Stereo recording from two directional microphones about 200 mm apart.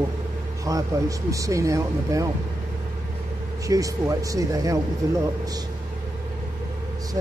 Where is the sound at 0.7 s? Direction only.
15° right (ahead or behind).